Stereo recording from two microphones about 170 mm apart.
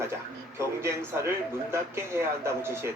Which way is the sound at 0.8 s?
15° right (ahead or behind).